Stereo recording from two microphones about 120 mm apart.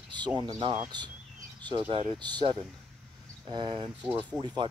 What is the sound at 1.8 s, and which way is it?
Speech, 50° right (ahead or behind).